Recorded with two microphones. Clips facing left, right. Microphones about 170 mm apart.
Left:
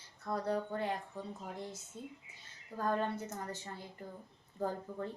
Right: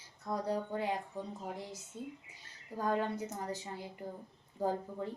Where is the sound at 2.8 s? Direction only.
15° right (ahead or behind).